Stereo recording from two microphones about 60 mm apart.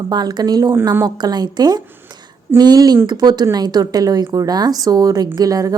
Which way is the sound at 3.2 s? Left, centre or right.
Right.